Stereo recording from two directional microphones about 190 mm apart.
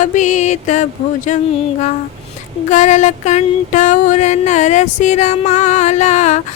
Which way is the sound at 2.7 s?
40° left (ahead or behind).